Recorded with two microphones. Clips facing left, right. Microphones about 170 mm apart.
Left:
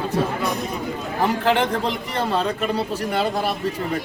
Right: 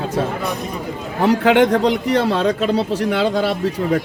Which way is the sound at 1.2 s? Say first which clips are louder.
Right 7 dB; 80° right.